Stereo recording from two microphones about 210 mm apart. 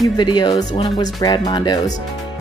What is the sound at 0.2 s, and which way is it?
Speech, 20° left (ahead or behind).